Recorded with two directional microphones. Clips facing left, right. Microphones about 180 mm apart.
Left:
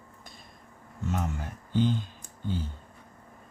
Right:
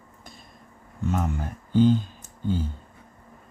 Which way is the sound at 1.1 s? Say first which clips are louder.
Right 4 dB; 45° right (ahead or behind).